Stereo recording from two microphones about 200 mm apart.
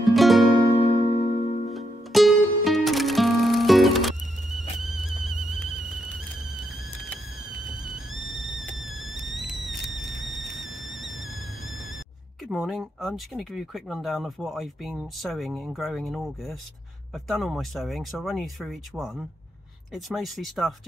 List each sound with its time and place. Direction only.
0.0 s music: centre (ahead or behind)
0.7 s music: 35° left (ahead or behind)
1.7 s music: centre (ahead or behind)
7.8 s music: centre (ahead or behind)
9.7 s a sound: centre (ahead or behind)
12.4 s speech: 5° right (ahead or behind)